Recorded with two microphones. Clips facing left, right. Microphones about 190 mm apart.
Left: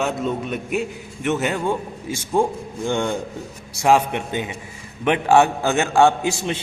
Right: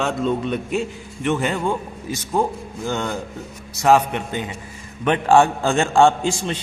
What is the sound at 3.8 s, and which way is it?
A man's voice, 10° left (ahead or behind).